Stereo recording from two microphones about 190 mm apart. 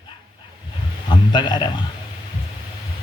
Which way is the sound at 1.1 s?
25° left (ahead or behind).